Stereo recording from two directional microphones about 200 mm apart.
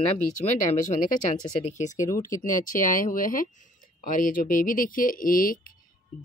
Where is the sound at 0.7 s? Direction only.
40° left (ahead or behind).